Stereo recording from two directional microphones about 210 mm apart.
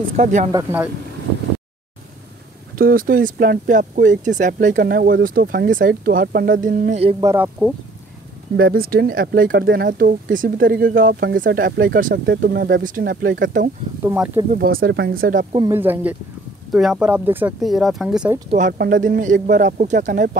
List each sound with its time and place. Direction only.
0.1 s speech: 35° right (ahead or behind)
0.5 s speech: 15° right (ahead or behind)
2.8 s speech: 45° right (ahead or behind)
7.2 s speech: 10° right (ahead or behind)
8.5 s speech: 45° right (ahead or behind)
14.0 s speech: 10° right (ahead or behind)
14.5 s speech: 45° right (ahead or behind)
15.7 s speech: 10° right (ahead or behind)
18.7 s speech: 45° right (ahead or behind)